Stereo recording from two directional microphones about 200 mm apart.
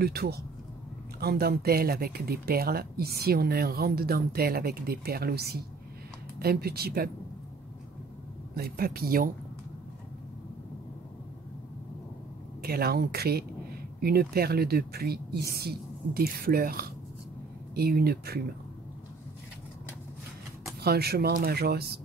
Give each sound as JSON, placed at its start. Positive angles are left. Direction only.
{"t": 0.0, "sound": "speech", "side_deg": -50}
{"t": 8.5, "sound": "speech", "side_deg": -50}
{"t": 12.6, "sound": "speech", "side_deg": -50}
{"t": 20.8, "sound": "speech", "side_deg": -50}